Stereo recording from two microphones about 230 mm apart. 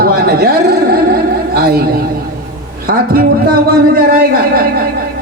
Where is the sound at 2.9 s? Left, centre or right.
Right.